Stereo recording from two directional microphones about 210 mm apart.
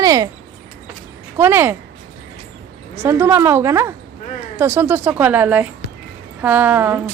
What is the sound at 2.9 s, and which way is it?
A woman's voice, 10° right (ahead or behind).